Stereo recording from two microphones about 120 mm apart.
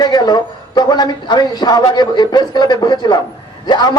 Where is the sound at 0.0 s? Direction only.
35° left (ahead or behind).